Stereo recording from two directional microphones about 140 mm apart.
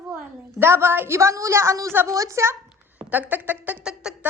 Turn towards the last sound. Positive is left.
turn(degrees=-5)  # may be behind; listen again after turning